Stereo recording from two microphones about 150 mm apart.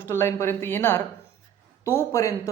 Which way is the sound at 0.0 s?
15° left (ahead or behind).